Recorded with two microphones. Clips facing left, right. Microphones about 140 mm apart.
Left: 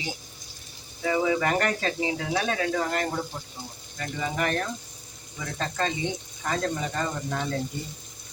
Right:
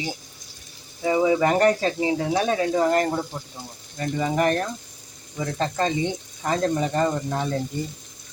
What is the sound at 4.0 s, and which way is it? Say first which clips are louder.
Speech: right 7 dB; 40° right (ahead or behind).